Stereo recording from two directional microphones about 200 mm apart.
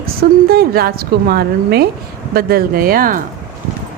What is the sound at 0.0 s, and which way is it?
A woman's voice, 50° right (ahead or behind).